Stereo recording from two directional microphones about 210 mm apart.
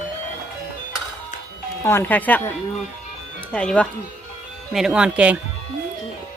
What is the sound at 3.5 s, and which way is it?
Speech, 5° left (ahead or behind).